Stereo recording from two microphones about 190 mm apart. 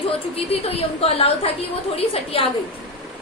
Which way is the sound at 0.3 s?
30° left (ahead or behind).